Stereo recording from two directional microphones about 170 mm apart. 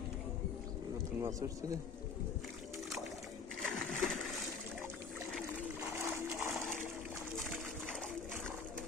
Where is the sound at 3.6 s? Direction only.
5° left (ahead or behind).